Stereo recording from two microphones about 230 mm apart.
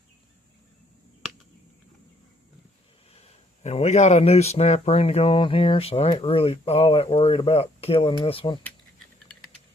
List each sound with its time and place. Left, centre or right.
3.2 s speech: left